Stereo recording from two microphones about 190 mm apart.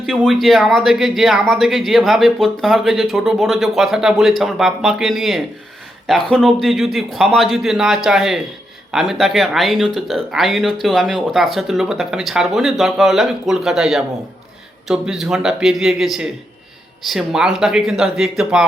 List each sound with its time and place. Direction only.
0.0 s speech: centre (ahead or behind)